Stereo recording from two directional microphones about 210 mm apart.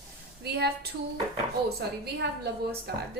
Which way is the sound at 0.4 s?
50° right (ahead or behind).